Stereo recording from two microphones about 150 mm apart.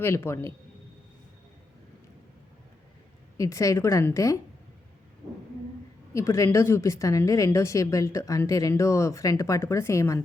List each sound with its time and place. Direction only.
0.0 s a man's voice: 15° left (ahead or behind)
3.3 s speech: 20° left (ahead or behind)
6.1 s speech: 20° left (ahead or behind)